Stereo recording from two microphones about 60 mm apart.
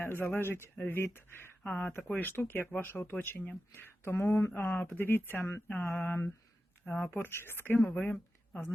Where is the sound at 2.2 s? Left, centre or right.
Left.